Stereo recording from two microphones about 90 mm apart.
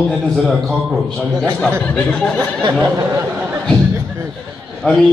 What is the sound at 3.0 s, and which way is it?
Speech, 35° right (ahead or behind).